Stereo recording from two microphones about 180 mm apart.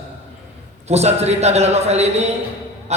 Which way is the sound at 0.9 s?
35° right (ahead or behind).